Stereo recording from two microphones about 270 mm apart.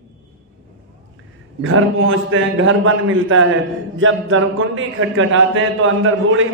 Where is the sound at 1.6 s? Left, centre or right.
Right.